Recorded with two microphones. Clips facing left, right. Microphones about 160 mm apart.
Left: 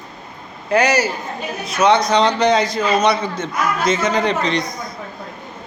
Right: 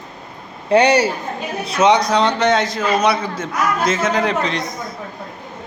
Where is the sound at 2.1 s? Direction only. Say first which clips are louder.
Left 1 dB; 5° right (ahead or behind).